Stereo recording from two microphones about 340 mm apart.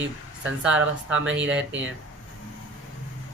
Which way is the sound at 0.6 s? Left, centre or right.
Centre.